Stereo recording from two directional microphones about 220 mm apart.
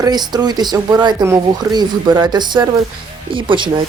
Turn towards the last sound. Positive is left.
turn(degrees=-20)  # may be behind; listen again after turning